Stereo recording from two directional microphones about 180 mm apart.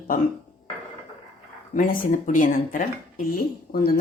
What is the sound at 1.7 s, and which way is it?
Speech, 50° left (ahead or behind).